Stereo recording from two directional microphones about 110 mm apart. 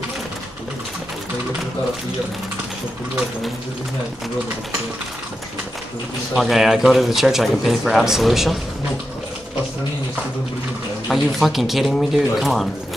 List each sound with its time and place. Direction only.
6.3 s a man's voice: centre (ahead or behind)
11.1 s a man's voice: centre (ahead or behind)